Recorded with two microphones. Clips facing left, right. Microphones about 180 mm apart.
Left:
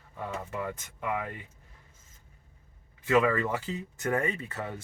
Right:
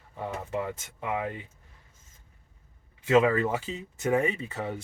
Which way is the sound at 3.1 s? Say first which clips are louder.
Right 3 dB; 25° right (ahead or behind).